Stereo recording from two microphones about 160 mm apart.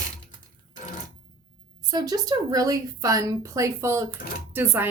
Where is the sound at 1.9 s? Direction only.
25° right (ahead or behind).